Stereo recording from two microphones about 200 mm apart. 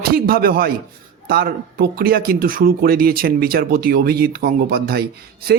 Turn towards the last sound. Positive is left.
turn(degrees=-50)  # may be behind; listen again after turning